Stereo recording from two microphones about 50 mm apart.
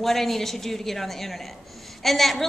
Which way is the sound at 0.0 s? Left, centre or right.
Centre.